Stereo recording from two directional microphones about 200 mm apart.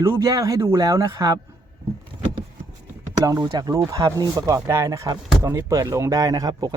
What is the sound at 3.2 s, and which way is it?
Speech, 20° right (ahead or behind).